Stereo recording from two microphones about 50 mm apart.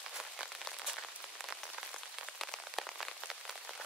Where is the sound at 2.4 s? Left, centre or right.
Centre.